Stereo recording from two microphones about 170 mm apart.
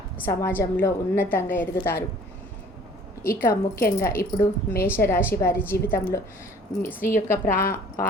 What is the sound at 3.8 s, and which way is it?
Speech, 60° left (ahead or behind).